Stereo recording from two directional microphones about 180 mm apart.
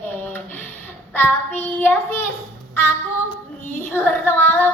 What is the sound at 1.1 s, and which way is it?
Child singing, 10° left (ahead or behind).